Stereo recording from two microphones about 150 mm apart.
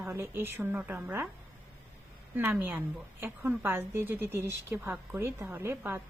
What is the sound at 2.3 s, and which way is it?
A woman's voice, 15° right (ahead or behind).